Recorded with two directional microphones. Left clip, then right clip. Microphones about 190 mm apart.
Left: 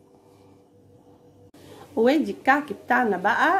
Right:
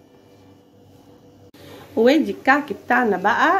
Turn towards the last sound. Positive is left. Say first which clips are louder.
# right 3 dB
turn(degrees=0)  # may be behind; listen again after turning